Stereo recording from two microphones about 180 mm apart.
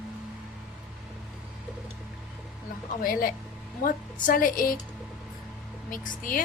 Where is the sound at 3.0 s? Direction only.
55° left (ahead or behind).